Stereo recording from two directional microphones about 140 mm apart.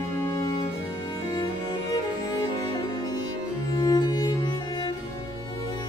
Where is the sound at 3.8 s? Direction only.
30° left (ahead or behind).